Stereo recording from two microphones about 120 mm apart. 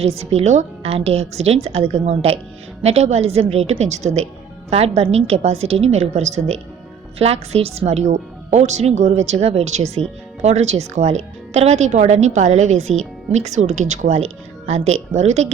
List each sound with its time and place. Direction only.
0.0 s a woman's voice: 60° right (ahead or behind); by 14.3 s 75° right (ahead or behind)
14.7 s speech: 65° right (ahead or behind)